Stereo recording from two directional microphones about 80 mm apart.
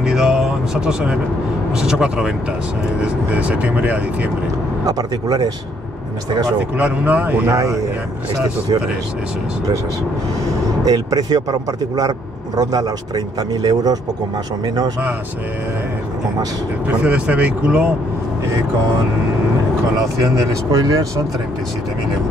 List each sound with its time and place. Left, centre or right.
0.0 s a sound: centre
1.8 s speech: centre
4.8 s speech: right
6.8 s speech: centre
10.8 s speech: right
16.8 s speech: centre
20.2 s speech: right